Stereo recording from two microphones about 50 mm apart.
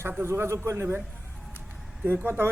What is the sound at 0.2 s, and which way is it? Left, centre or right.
Speech, right.